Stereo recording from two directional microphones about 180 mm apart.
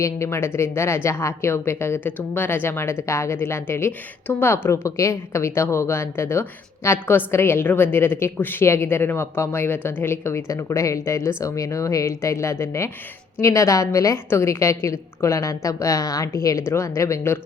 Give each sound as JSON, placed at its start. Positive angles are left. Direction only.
{"t": 0.0, "sound": "a woman's voice", "side_deg": 15}